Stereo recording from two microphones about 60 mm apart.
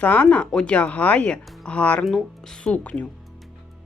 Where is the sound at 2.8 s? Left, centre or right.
Left.